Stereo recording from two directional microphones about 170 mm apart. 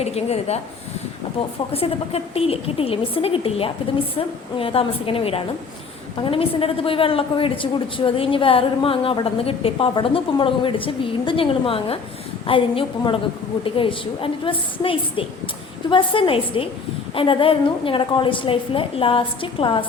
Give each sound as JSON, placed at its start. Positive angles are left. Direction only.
{"t": 0.0, "sound": "a woman's voice", "side_deg": 40}